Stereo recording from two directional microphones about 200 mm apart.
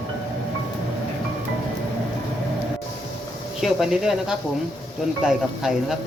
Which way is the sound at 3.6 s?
Centre (ahead or behind).